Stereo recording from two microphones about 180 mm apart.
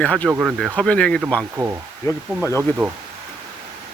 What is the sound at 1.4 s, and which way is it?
Speech, 15° right (ahead or behind).